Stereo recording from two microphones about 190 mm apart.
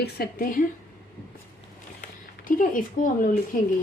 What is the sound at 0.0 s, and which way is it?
Speech, 55° left (ahead or behind).